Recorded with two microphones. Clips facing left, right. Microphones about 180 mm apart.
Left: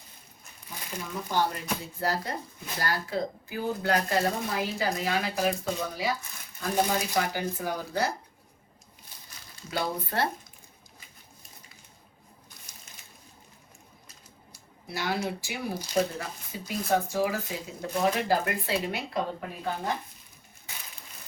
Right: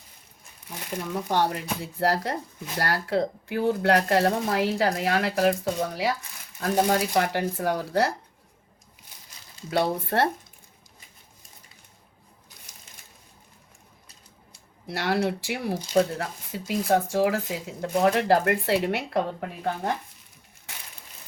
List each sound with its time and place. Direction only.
0.9 s speech: 65° right (ahead or behind)
6.6 s speech: 60° right (ahead or behind); by 8.1 s 85° right
9.6 s speech: 65° right (ahead or behind)
14.8 s speech: 75° right (ahead or behind)
17.9 s speech: 65° right (ahead or behind)